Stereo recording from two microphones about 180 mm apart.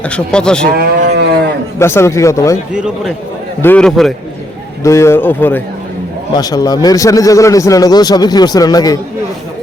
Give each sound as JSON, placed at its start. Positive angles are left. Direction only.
{"t": 0.0, "sound": "speech", "side_deg": 5}
{"t": 0.8, "sound": "cattle", "side_deg": -70}
{"t": 1.8, "sound": "a man's voice", "side_deg": 15}
{"t": 2.7, "sound": "speech", "side_deg": -5}
{"t": 3.6, "sound": "speech", "side_deg": 10}
{"t": 4.8, "sound": "a man's voice", "side_deg": 15}